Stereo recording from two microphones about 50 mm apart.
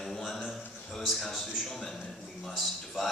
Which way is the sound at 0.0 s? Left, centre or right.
Centre.